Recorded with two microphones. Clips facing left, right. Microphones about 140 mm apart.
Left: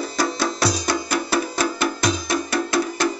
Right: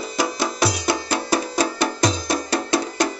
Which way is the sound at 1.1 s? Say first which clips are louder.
Right 1 dB; 30° right (ahead or behind).